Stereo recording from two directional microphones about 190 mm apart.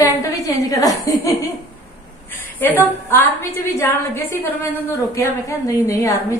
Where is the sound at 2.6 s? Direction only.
10° left (ahead or behind).